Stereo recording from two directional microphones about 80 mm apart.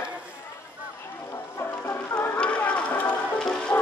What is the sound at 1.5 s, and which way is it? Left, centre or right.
Music, left.